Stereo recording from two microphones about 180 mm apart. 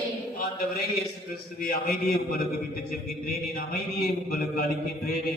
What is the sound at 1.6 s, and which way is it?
A man's voice, 55° left (ahead or behind).